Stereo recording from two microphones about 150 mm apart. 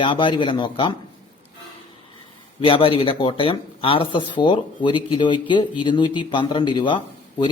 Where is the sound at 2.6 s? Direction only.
35° left (ahead or behind).